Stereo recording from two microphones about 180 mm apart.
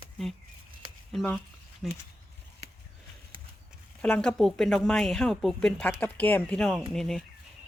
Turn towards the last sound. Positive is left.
turn(degrees=0)  # may be behind; listen again after turning